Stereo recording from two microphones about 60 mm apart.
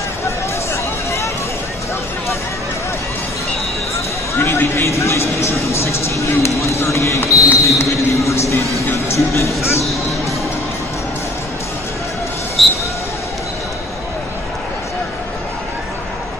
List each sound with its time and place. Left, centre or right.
4.4 s a man's voice: left
7.5 s basketball bounce: left
8.9 s a man's voice: left
12.6 s a sound: centre